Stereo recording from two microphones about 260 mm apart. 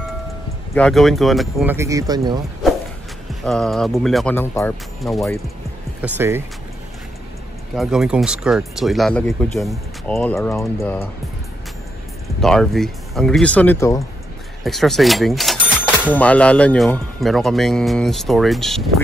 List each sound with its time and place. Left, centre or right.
0.7 s speech: centre
3.4 s speech: centre
5.9 s speech: centre
7.7 s speech: centre
12.4 s speech: centre
14.6 s speech: centre